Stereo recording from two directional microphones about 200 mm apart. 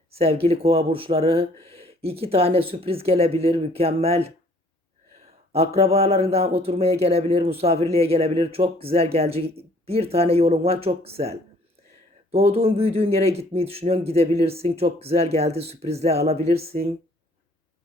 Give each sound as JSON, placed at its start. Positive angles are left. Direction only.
{"t": 0.1, "sound": "speech", "side_deg": -30}
{"t": 5.5, "sound": "speech", "side_deg": -30}